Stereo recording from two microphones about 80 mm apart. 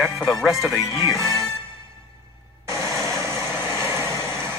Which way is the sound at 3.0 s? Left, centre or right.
Right.